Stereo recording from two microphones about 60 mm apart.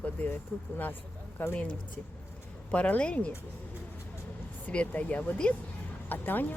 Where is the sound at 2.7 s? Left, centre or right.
Left.